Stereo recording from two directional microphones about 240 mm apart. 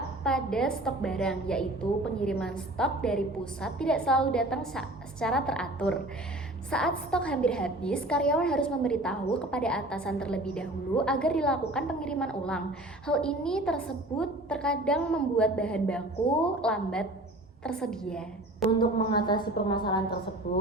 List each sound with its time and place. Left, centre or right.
0.3 s a woman's voice: centre
18.7 s a woman's voice: centre
20.5 s speech: left